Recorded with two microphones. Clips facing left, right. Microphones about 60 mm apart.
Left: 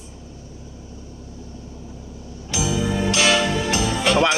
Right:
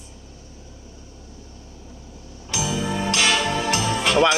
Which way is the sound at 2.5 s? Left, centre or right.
Centre.